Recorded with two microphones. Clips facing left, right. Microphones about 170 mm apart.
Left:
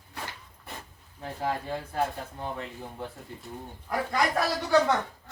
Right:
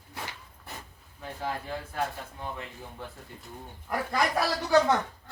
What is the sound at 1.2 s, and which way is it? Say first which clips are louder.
Speech: left 3 dB; 30° left (ahead or behind).